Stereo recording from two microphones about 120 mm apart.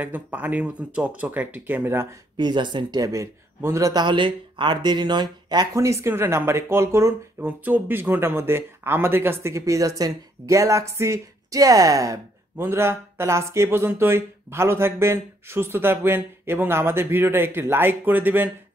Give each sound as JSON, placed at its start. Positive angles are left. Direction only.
{"t": 0.0, "sound": "speech", "side_deg": -15}
{"t": 2.3, "sound": "speech", "side_deg": -40}
{"t": 4.0, "sound": "speech", "side_deg": -40}